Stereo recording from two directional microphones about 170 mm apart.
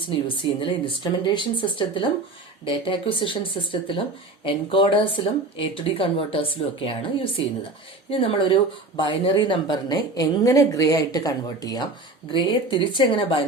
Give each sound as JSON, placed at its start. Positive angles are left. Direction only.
{"t": 0.1, "sound": "speech", "side_deg": 30}